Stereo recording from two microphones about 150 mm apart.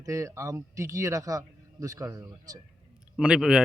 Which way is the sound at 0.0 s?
20° right (ahead or behind).